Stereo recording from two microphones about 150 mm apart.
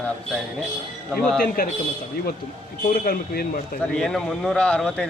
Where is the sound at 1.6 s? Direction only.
80° left.